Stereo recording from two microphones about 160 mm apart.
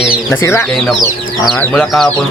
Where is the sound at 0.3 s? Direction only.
15° left (ahead or behind).